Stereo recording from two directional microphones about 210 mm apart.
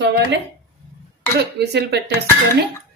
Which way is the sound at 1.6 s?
55° right (ahead or behind).